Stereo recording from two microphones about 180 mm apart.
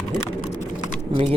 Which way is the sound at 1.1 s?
30° right (ahead or behind).